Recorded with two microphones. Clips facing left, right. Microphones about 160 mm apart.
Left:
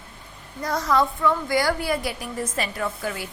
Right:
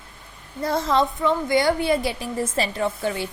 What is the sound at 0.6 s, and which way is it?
A woman's voice, 25° right (ahead or behind).